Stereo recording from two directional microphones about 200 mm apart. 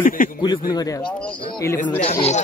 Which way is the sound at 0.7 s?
20° left (ahead or behind).